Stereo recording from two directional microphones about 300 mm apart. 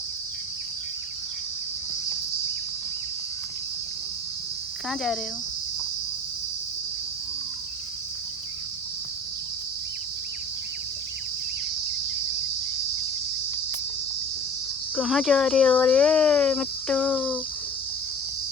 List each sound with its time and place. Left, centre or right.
14.9 s speech: centre